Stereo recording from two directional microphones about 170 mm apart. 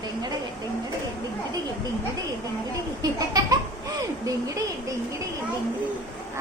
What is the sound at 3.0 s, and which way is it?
A woman's voice, 20° right (ahead or behind).